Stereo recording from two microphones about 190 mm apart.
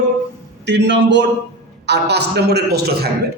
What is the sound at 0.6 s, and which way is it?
A man's voice, 65° right (ahead or behind).